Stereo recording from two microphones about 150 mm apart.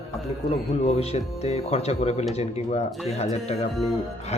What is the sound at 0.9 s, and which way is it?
Speech, 45° left (ahead or behind).